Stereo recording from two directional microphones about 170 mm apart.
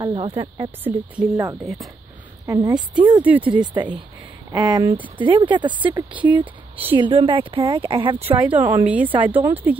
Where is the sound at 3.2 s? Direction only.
10° right (ahead or behind).